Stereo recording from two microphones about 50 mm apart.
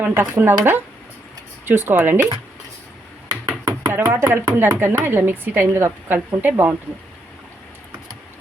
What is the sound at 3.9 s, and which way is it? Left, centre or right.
A woman's voice, right.